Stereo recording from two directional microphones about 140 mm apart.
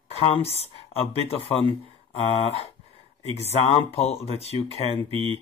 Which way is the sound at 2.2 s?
50° left (ahead or behind).